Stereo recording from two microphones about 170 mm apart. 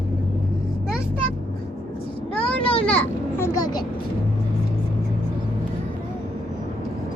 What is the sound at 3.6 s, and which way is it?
Speech, 25° left (ahead or behind).